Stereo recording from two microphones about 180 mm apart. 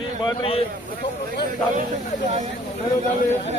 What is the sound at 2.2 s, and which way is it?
Speech, 40° right (ahead or behind).